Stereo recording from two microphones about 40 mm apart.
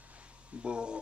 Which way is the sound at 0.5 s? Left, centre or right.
Right.